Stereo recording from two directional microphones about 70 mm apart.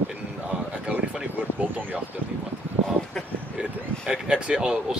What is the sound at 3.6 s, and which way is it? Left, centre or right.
Speech, centre.